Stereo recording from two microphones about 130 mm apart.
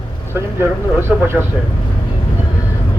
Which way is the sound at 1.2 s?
15° right (ahead or behind).